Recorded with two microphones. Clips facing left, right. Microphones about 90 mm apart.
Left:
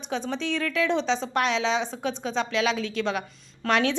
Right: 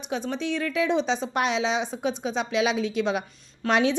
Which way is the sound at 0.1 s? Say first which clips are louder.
Even; 5° right (ahead or behind).